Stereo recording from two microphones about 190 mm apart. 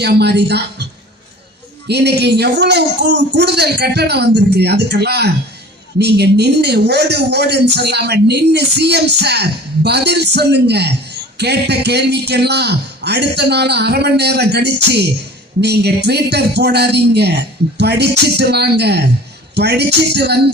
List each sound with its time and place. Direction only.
0.0 s a man's voice: 60° right (ahead or behind)
1.9 s a man's voice: 60° right (ahead or behind)